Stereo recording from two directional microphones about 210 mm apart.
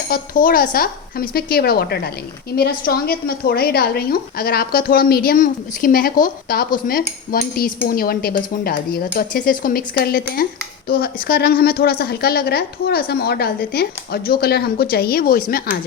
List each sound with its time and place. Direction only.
0.1 s a woman's voice: 40° left (ahead or behind)